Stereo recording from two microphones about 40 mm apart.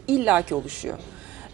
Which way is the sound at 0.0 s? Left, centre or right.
Right.